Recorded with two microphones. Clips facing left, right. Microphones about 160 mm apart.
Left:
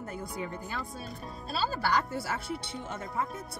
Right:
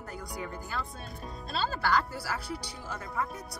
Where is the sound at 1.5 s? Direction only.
10° left (ahead or behind).